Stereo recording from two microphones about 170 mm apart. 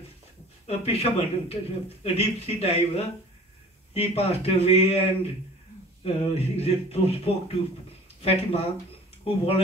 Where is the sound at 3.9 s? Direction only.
35° left (ahead or behind).